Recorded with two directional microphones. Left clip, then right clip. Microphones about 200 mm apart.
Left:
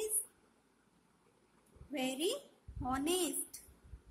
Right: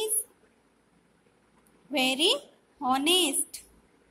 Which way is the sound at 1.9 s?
15° right (ahead or behind).